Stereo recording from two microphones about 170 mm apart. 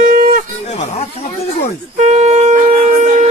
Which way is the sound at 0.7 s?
40° left (ahead or behind).